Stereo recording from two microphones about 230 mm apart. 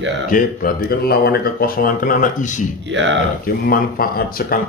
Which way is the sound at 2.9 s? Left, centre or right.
Right.